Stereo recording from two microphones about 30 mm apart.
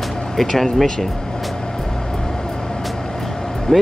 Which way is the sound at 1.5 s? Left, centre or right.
Centre.